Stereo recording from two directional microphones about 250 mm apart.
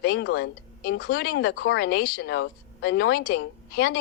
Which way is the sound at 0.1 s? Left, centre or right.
Left.